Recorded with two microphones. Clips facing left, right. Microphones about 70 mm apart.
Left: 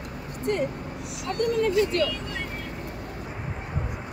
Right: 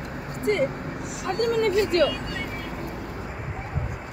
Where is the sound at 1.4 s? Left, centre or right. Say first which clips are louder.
Right 1 dB; right.